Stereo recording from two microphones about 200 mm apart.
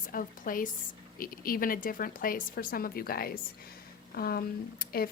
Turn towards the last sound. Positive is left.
turn(degrees=50)  # may be behind; listen again after turning